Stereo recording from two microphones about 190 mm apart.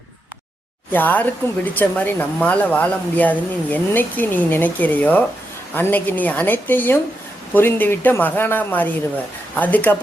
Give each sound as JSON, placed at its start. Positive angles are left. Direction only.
{"t": 0.9, "sound": "speech", "side_deg": 10}